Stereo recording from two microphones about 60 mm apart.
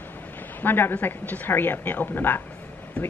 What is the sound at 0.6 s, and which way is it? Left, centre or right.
A woman's voice, left.